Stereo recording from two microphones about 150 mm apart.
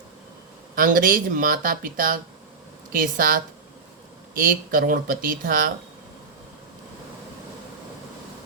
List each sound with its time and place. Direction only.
0.8 s speech: 70° right (ahead or behind)